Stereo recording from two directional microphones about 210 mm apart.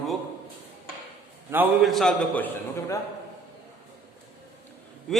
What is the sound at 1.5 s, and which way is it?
A man's voice, 5° right (ahead or behind).